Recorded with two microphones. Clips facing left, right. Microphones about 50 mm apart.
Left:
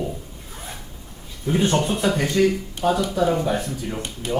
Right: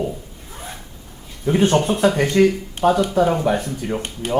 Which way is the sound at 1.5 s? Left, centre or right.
Right.